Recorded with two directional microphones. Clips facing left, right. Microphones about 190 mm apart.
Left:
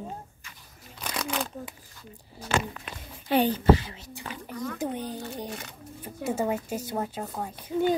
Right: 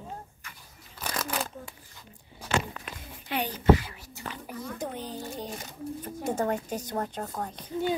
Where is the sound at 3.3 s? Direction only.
30° left (ahead or behind).